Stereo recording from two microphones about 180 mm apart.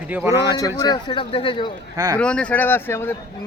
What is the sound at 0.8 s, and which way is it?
Speech, 25° left (ahead or behind).